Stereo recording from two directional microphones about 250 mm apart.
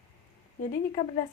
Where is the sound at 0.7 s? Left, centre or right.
Left.